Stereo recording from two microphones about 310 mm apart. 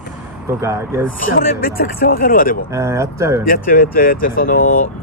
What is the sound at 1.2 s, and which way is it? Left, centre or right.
Speech, left.